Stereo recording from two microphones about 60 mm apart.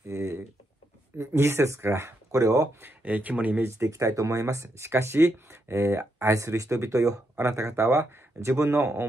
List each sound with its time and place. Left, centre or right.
0.1 s a sound: right
1.1 s speech: right
3.0 s speech: right
3.6 s speech: right
8.5 s speech: right